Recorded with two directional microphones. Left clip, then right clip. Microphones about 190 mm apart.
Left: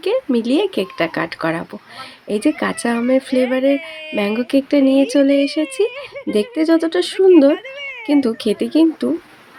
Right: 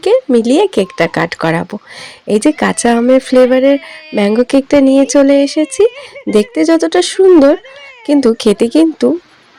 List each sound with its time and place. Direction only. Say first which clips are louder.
0.0 s speech: right 8 dB; 35° right (ahead or behind)